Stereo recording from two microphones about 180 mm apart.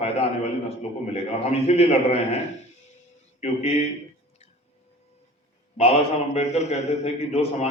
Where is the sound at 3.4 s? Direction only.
35° left (ahead or behind).